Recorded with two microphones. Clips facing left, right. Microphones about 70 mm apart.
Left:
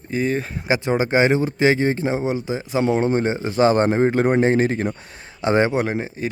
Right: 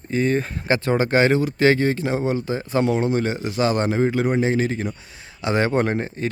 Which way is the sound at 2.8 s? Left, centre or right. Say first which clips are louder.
Left 3 dB; left.